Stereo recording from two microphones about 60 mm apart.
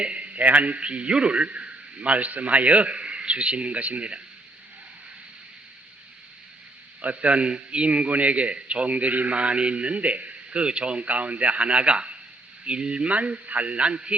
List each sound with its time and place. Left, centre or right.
0.0 s a man's voice: right
7.0 s a man's voice: right